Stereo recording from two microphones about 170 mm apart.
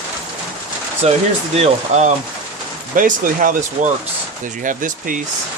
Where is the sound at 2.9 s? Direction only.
55° right (ahead or behind).